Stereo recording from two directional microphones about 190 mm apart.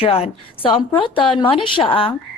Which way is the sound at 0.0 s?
30° left (ahead or behind).